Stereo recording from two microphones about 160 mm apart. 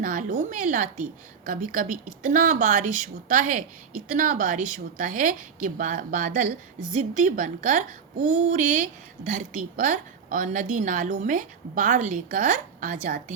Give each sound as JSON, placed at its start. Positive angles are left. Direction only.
{"t": 0.0, "sound": "a woman's voice", "side_deg": -55}